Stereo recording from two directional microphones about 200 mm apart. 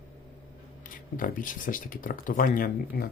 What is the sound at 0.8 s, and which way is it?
Speech, 45° left (ahead or behind).